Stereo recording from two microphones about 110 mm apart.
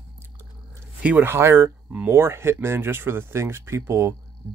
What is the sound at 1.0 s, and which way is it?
Speech, 15° right (ahead or behind).